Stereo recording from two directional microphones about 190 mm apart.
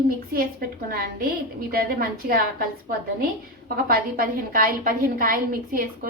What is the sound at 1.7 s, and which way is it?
A woman's voice, 50° right (ahead or behind).